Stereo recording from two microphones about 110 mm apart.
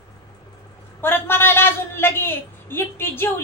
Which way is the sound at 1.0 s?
20° left (ahead or behind).